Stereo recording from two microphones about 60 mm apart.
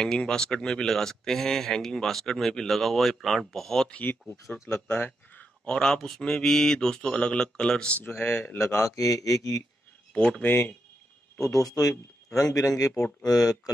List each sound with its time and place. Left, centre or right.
0.0 s speech: centre
3.9 s speech: left
4.8 s a sound: left
5.7 s speech: centre
8.1 s a man's voice: left
10.1 s speech: centre
10.4 s speech: left
11.3 s speech: left
13.2 s speech: left